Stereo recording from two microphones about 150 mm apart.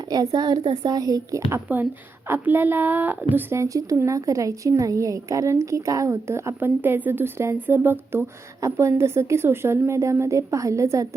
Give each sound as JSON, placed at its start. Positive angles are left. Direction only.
{"t": 0.1, "sound": "a woman's voice", "side_deg": -25}